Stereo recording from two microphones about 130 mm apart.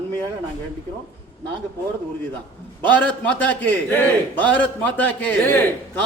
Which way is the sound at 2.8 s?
15° left (ahead or behind).